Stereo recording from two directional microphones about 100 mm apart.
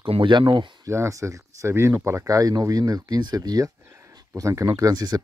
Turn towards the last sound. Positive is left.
turn(degrees=-40)  # may be behind; listen again after turning